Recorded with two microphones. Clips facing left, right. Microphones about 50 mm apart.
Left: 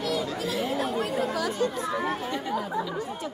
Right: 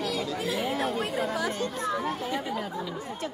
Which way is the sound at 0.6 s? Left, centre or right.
Right.